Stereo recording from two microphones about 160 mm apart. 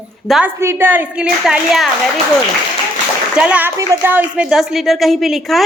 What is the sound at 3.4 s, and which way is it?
Speech, 10° right (ahead or behind).